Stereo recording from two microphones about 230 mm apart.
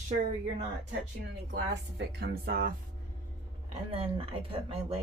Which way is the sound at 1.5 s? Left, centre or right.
Right.